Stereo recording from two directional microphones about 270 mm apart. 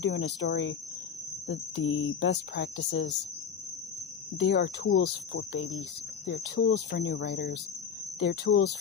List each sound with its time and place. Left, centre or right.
0.0 s speech: left
4.4 s speech: left